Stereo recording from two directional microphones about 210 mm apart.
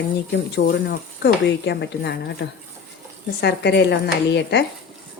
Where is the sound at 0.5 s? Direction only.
50° left (ahead or behind).